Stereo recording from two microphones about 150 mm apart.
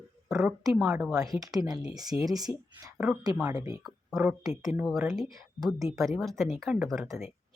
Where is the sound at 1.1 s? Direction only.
25° right (ahead or behind).